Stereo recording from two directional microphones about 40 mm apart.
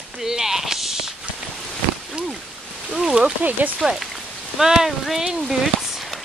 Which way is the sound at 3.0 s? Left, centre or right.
Right.